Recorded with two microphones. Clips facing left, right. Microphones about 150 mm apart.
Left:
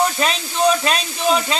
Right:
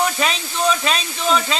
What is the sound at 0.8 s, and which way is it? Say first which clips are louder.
Speech: left 2 dB; 5° left (ahead or behind).